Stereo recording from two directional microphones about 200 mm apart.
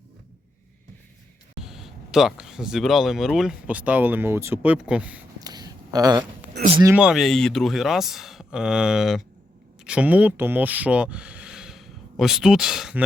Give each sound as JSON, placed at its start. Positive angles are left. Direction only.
{"t": 1.6, "sound": "speech", "side_deg": 0}
{"t": 5.4, "sound": "a sound", "side_deg": -20}
{"t": 6.8, "sound": "speech", "side_deg": -5}